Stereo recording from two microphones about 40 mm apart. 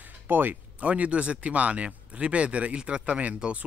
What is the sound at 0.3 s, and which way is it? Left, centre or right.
Speech, right.